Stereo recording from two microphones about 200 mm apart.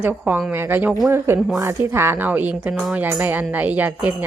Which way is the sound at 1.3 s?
Centre (ahead or behind).